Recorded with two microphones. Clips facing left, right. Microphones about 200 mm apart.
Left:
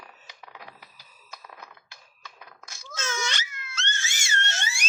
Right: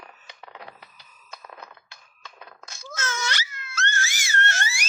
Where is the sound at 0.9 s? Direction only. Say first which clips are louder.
Right 1 dB; 35° left (ahead or behind).